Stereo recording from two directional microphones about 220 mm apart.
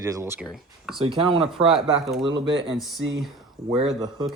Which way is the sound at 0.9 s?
25° right (ahead or behind).